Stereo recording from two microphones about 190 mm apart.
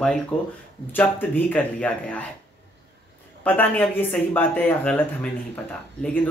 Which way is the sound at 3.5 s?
10° left (ahead or behind).